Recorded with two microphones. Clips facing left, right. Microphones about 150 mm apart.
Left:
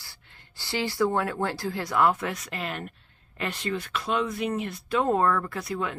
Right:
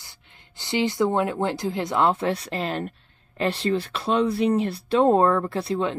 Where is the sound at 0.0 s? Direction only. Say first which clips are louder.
Right 1 dB; 20° right (ahead or behind).